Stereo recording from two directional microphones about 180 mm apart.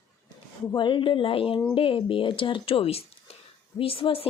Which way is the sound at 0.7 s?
25° left (ahead or behind).